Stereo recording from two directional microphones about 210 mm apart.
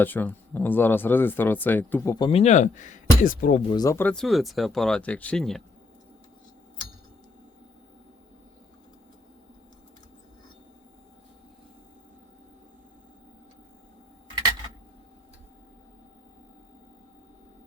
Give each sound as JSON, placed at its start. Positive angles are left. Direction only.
{"t": 0.0, "sound": "speech", "side_deg": 10}
{"t": 2.1, "sound": "speech", "side_deg": 20}
{"t": 2.4, "sound": "speech", "side_deg": 35}
{"t": 3.7, "sound": "speech", "side_deg": 15}